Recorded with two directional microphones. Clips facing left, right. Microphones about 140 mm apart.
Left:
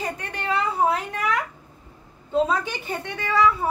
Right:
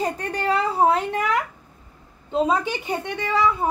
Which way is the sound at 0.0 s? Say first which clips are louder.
Right 5 dB; 35° right (ahead or behind).